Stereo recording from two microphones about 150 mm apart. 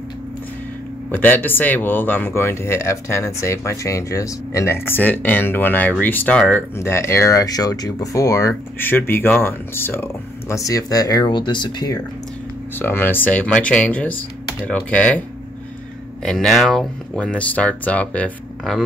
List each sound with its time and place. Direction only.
1.1 s speech: 10° left (ahead or behind); by 12.0 s 30° left (ahead or behind)
12.7 s speech: 15° left (ahead or behind)